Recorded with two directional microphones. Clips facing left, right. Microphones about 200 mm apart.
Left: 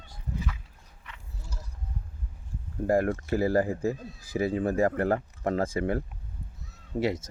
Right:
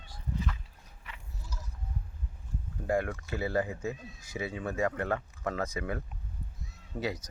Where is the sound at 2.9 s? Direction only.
45° left (ahead or behind).